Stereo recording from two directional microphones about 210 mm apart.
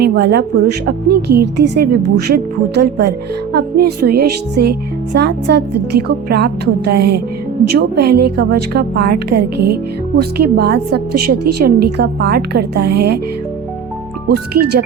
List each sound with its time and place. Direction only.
0.0 s a woman's voice: 50° right (ahead or behind)
14.3 s a woman's voice: 50° right (ahead or behind)